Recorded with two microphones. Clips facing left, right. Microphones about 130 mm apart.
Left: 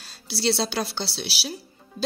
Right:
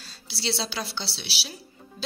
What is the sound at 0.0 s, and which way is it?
Speech, 50° left (ahead or behind).